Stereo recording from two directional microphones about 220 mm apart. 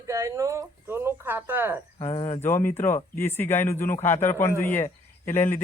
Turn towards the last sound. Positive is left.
turn(degrees=10)  # may be behind; listen again after turning